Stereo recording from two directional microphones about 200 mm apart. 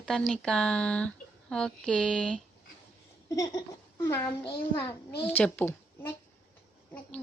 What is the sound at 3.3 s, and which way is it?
A child's voice, 15° left (ahead or behind).